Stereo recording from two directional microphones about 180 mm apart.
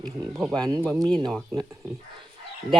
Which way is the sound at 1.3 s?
5° left (ahead or behind).